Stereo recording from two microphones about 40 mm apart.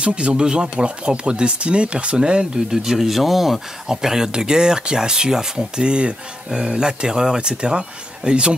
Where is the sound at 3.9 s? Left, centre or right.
Centre.